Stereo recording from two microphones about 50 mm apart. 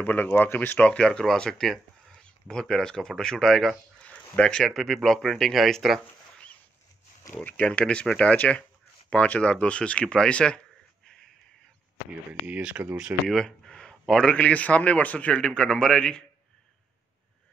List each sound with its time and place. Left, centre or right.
0.0 s speech: left; by 4.6 s centre
4.6 s speech: centre
7.6 s a man's voice: left
12.3 s speech: right
13.3 s a sound: centre
14.4 s a man's voice: left